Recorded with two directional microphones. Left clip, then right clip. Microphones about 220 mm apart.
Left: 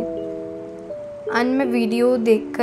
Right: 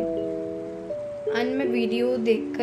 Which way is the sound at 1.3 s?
25° left (ahead or behind).